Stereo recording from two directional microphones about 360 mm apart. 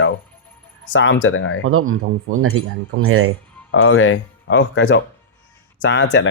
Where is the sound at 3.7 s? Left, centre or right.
Left.